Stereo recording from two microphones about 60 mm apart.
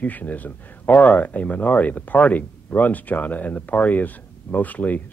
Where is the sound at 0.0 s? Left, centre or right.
Left.